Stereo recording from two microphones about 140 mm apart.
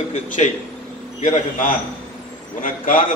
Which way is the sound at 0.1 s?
55° left (ahead or behind).